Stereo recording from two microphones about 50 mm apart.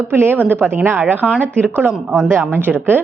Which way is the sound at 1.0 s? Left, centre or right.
Right.